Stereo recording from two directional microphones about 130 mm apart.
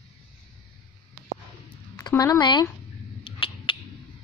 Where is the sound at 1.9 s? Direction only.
25° left (ahead or behind).